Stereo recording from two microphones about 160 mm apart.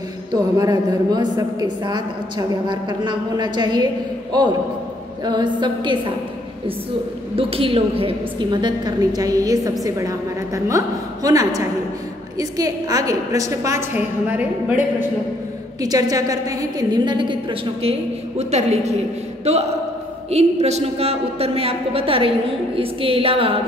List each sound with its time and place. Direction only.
0.3 s a woman's voice: 25° right (ahead or behind)
7.3 s a woman's voice: 35° right (ahead or behind); by 14.9 s 10° right (ahead or behind)
15.8 s a woman's voice: 25° right (ahead or behind)
18.4 s a woman's voice: 45° right (ahead or behind)
20.2 s a woman's voice: 40° right (ahead or behind)